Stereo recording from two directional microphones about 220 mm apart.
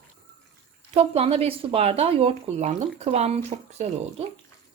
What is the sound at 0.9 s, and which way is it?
Speech, 30° right (ahead or behind).